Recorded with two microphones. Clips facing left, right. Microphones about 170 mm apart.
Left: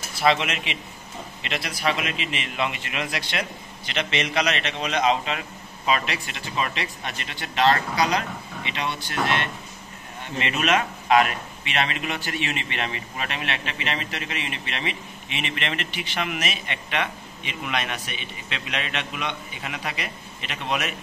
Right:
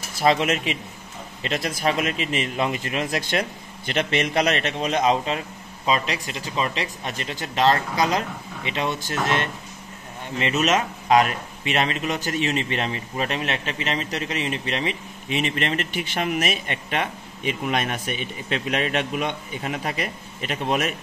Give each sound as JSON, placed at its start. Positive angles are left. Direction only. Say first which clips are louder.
{"t": 0.2, "sound": "a man's voice", "louder": "right 2 dB", "side_deg": -40}
{"t": 5.9, "sound": "a man's voice", "louder": "right 1 dB", "side_deg": -30}